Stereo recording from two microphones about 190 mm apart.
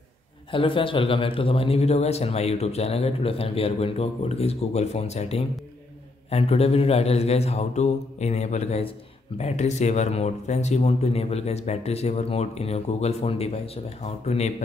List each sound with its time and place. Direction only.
0.5 s speech: 25° left (ahead or behind)